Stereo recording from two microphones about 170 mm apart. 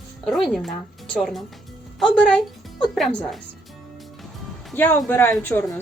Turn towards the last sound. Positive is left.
turn(degrees=5)  # may be behind; listen again after turning